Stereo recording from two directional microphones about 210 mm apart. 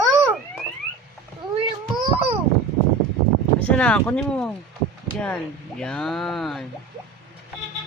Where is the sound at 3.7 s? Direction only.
5° left (ahead or behind).